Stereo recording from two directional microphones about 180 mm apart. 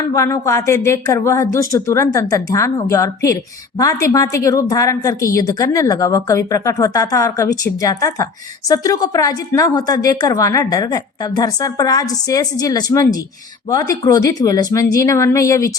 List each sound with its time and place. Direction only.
0.1 s a woman's voice: 15° left (ahead or behind)